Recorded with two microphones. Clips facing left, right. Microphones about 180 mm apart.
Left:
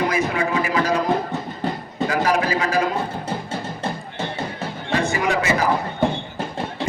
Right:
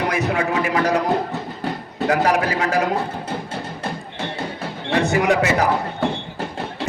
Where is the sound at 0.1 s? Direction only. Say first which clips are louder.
Right 1 dB; 70° right (ahead or behind).